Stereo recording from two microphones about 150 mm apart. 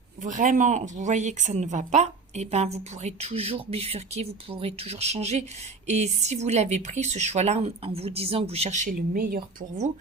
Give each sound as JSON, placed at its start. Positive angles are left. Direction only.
{"t": 0.2, "sound": "speech", "side_deg": -60}